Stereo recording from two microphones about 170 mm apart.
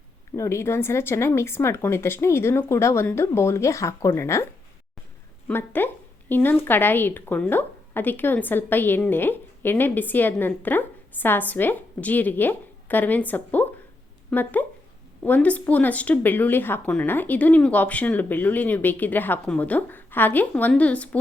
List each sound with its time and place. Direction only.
0.3 s a woman's voice: 15° left (ahead or behind)
5.5 s a woman's voice: 10° left (ahead or behind)